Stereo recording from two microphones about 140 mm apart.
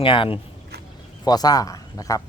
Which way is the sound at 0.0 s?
40° left (ahead or behind).